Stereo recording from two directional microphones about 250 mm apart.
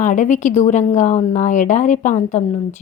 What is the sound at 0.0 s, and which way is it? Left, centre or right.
A woman's voice, left.